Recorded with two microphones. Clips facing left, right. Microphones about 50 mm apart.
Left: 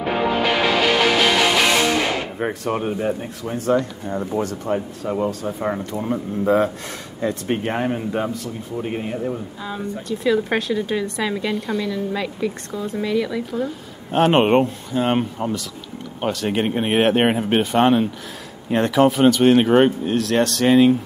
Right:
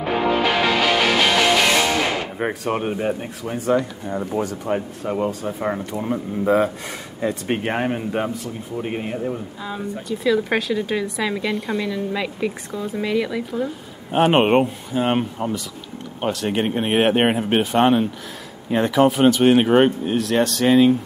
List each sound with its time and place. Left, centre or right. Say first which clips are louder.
0.0 s music: even; centre
2.3 s speech: even; centre
4.5 s speech: even; centre
9.2 s speech: even; centre
11.6 s speech: even; centre
12.7 s speech: even; centre
13.0 s speech: even; centre